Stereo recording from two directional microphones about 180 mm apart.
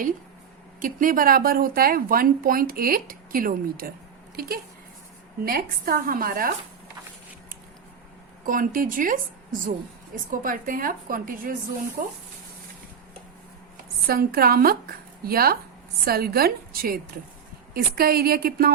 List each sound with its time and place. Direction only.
0.8 s speech: 45° right (ahead or behind)
8.4 s speech: 50° right (ahead or behind)
14.1 s a woman's voice: 55° right (ahead or behind)